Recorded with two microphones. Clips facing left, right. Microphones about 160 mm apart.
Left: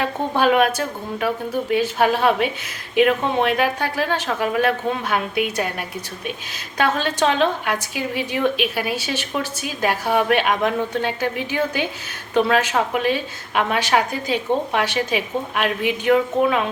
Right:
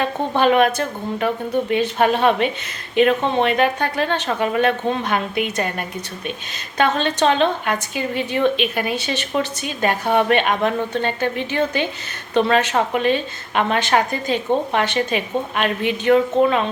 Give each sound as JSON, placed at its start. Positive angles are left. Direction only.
{"t": 0.0, "sound": "a woman's voice", "side_deg": 5}
{"t": 6.7, "sound": "a woman's voice", "side_deg": 5}